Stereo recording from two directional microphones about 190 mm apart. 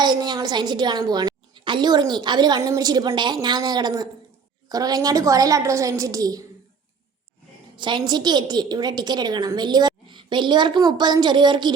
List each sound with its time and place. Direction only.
0.0 s a woman's voice: 20° right (ahead or behind)
7.8 s a woman's voice: 25° right (ahead or behind)